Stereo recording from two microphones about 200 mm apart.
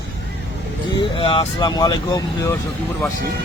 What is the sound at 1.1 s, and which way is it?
Speech, 25° left (ahead or behind).